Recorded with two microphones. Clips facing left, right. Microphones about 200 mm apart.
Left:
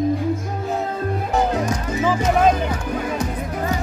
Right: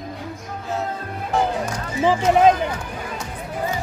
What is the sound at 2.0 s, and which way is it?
Music, 20° right (ahead or behind).